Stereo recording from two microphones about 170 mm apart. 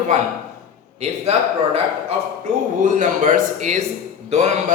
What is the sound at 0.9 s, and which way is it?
Mantra, 40° right (ahead or behind).